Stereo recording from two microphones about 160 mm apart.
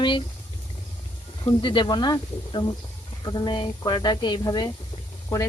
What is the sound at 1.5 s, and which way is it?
Speech, 30° left (ahead or behind).